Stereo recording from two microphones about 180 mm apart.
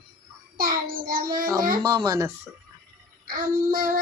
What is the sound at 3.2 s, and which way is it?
Child singing, 50° right (ahead or behind).